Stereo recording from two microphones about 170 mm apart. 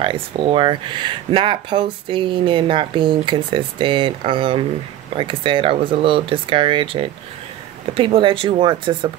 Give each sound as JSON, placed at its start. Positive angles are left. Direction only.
{"t": 0.0, "sound": "speech", "side_deg": -30}